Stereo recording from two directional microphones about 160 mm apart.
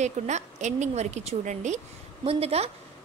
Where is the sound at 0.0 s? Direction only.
45° right (ahead or behind).